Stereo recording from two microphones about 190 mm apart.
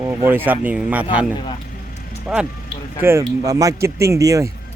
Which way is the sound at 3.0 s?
15° right (ahead or behind).